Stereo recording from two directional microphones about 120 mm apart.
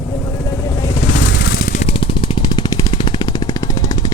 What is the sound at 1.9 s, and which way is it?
Vehicle, 45° left (ahead or behind).